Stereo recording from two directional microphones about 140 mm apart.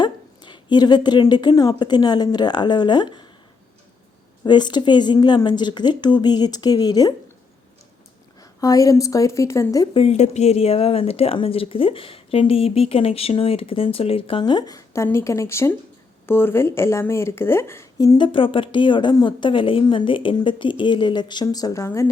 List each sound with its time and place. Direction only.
0.0 s speech: 35° left (ahead or behind)
4.4 s speech: 30° left (ahead or behind)
8.4 s speech: 25° left (ahead or behind)
9.9 s speech: 45° left (ahead or behind); by 17.8 s 15° left (ahead or behind)
17.9 s speech: 30° left (ahead or behind)